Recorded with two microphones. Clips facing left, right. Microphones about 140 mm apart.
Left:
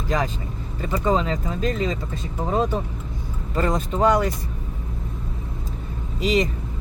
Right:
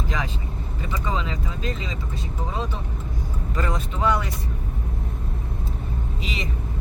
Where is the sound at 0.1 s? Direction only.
40° left (ahead or behind).